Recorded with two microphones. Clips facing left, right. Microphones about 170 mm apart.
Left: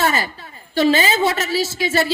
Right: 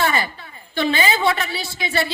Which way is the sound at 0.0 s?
40° left (ahead or behind).